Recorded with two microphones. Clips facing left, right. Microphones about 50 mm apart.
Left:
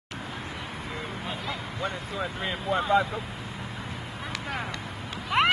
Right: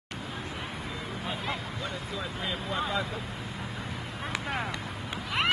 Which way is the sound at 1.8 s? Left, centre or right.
Left.